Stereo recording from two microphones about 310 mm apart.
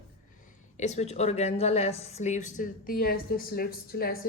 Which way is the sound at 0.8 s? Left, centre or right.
Left.